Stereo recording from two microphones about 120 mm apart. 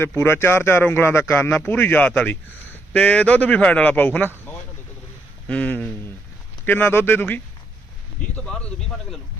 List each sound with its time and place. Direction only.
0.0 s a man's voice: 20° left (ahead or behind)
5.5 s a man's voice: 10° left (ahead or behind)